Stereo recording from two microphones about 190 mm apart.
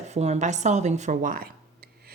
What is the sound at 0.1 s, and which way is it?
A woman's voice, 35° right (ahead or behind).